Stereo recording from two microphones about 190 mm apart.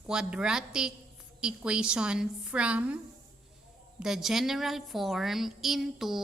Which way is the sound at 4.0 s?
Centre (ahead or behind).